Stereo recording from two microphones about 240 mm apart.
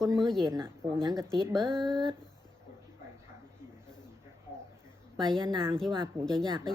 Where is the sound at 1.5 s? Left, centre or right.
Centre.